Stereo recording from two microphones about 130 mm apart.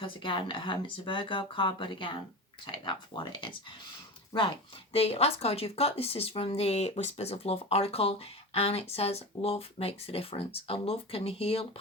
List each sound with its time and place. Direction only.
0.0 s speech: 40° left (ahead or behind)